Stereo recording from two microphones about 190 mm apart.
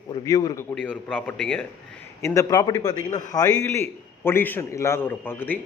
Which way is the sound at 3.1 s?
40° left (ahead or behind).